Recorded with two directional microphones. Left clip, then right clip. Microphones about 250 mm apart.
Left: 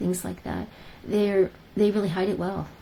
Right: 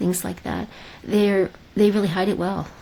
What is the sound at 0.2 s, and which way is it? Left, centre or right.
Speech, right.